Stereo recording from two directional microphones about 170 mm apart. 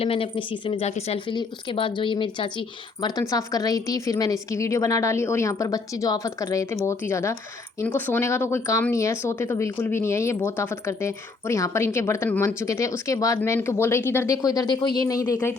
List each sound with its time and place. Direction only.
0.0 s speech: 35° left (ahead or behind); by 15.5 s 15° left (ahead or behind)